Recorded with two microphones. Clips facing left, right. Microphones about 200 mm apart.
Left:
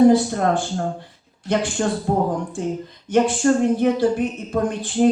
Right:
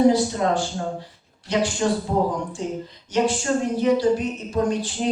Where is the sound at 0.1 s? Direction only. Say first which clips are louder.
Left 3 dB; 55° left (ahead or behind).